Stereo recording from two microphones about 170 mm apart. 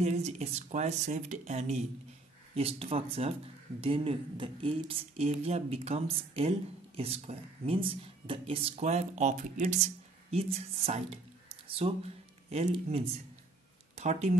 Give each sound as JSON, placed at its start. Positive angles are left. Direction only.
{"t": 0.0, "sound": "speech", "side_deg": -40}